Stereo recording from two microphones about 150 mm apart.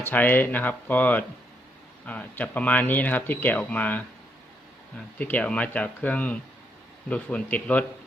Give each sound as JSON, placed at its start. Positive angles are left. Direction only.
{"t": 0.0, "sound": "speech", "side_deg": 10}
{"t": 5.1, "sound": "speech", "side_deg": 10}